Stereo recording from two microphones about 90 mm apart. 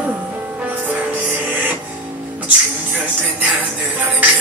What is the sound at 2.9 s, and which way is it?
Music, 20° right (ahead or behind).